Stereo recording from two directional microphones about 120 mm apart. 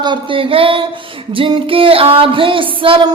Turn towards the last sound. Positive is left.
turn(degrees=-45)  # may be behind; listen again after turning